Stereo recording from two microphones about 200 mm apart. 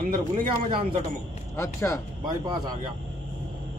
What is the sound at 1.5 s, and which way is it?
Speech, 15° left (ahead or behind).